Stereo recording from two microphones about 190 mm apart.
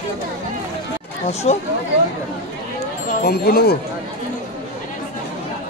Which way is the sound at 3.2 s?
55° left (ahead or behind).